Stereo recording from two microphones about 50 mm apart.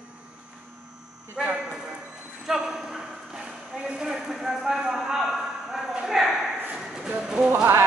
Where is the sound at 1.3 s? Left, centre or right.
Right.